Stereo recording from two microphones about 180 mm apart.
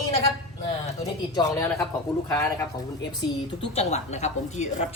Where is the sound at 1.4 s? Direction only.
20° left (ahead or behind).